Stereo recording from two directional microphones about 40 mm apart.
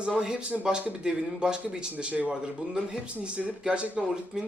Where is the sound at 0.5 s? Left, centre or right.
Centre.